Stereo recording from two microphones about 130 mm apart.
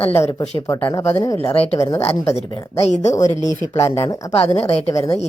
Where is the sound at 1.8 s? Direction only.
20° left (ahead or behind).